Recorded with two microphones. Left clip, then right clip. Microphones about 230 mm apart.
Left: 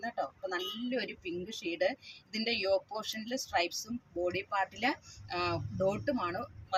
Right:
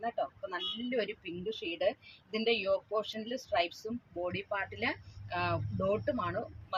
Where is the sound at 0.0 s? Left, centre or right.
Centre.